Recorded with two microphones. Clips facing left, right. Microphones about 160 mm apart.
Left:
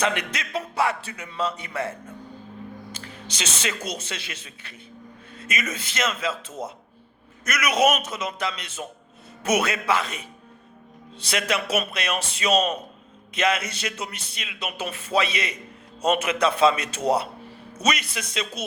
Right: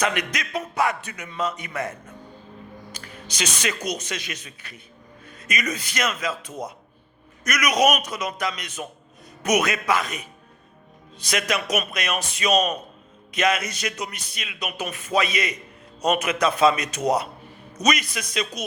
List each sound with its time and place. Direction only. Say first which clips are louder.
0.0 s a man's voice: right 1 dB; 30° left (ahead or behind)
2.9 s music: left 1 dB; 30° left (ahead or behind)
3.8 s speech: right 3 dB; 30° left (ahead or behind)
5.4 s a sound: right 1 dB; 25° left (ahead or behind)
5.7 s speech: right 1 dB; 25° left (ahead or behind)